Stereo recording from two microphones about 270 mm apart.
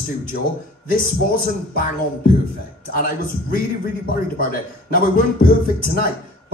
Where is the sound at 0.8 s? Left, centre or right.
Left.